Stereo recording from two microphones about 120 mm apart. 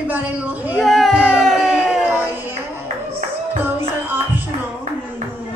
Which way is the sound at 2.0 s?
20° right (ahead or behind).